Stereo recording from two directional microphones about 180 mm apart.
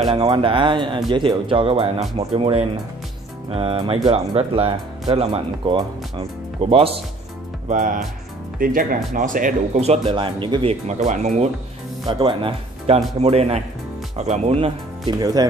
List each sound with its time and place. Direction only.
0.1 s speech: 30° right (ahead or behind)
7.6 s speech: 45° right (ahead or behind)
12.1 s speech: 25° right (ahead or behind)
15.1 s speech: 20° right (ahead or behind)